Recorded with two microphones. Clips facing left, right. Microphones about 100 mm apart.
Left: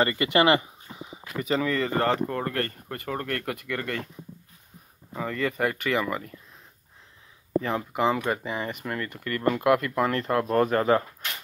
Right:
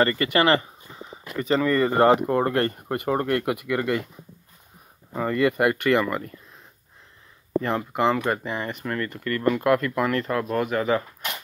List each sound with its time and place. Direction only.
0.0 s speech: 20° left (ahead or behind)
1.3 s speech: 5° left (ahead or behind)
2.0 s speech: 15° right (ahead or behind)
5.1 s speech: 5° right (ahead or behind)
7.6 s speech: 5° left (ahead or behind); by 10.4 s 25° left (ahead or behind)
10.5 s speech: 40° left (ahead or behind)